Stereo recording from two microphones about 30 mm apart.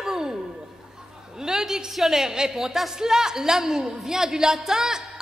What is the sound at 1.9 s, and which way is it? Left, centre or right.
A man's voice, centre.